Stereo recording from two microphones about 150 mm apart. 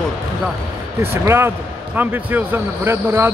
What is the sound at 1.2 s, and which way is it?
Speech, 15° right (ahead or behind).